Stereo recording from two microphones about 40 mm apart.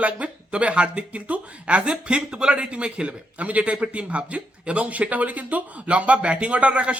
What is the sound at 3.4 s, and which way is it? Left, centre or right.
Speech, right.